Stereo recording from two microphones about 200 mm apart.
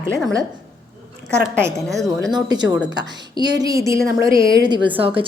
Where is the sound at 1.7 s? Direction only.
Centre (ahead or behind).